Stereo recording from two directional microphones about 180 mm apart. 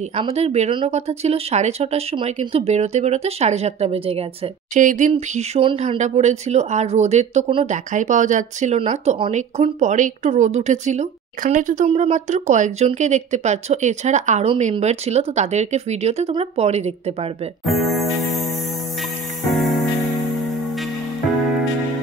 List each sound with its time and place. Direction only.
0.1 s speech: 35° right (ahead or behind)
4.7 s speech: 45° right (ahead or behind)
17.6 s music: centre (ahead or behind)
19.5 s music: centre (ahead or behind)